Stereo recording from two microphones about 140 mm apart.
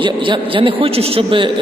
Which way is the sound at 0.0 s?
35° right (ahead or behind).